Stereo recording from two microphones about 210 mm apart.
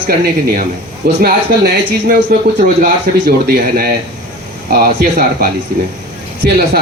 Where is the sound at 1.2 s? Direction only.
45° right (ahead or behind).